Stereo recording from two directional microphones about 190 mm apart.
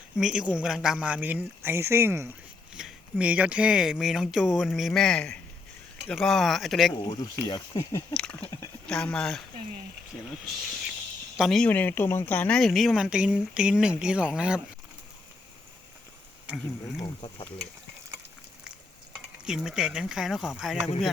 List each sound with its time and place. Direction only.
0.2 s speech: 5° right (ahead or behind)
7.0 s speech: 20° left (ahead or behind)
8.1 s speech: 5° left (ahead or behind)
11.3 s speech: centre (ahead or behind)
16.5 s speech: centre (ahead or behind)
17.2 s speech: 25° left (ahead or behind)
19.5 s speech: 5° right (ahead or behind)